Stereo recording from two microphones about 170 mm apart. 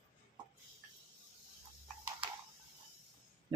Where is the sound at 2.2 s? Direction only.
30° right (ahead or behind).